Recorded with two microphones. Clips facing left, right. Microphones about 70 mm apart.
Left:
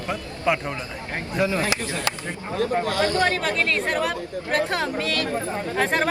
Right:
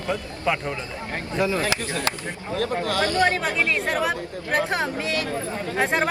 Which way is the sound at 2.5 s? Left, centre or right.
Left.